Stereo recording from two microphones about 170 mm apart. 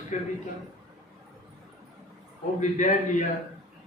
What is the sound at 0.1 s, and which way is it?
Speech, 40° left (ahead or behind).